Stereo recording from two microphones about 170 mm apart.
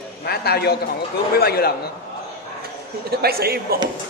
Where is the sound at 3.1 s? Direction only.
65° right (ahead or behind).